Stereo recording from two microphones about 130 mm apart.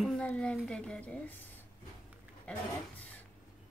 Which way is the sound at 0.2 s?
10° left (ahead or behind).